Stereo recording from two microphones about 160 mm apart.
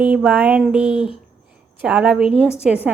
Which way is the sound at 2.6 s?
Centre (ahead or behind).